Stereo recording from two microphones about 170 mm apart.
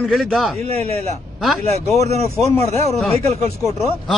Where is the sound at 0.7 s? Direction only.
35° right (ahead or behind).